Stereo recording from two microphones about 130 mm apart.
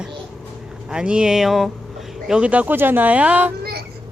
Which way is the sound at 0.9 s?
5° right (ahead or behind).